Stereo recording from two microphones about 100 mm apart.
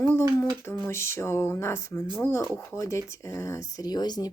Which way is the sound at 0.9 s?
25° left (ahead or behind).